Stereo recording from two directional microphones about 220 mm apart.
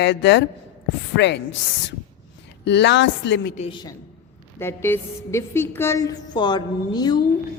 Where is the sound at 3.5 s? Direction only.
20° left (ahead or behind).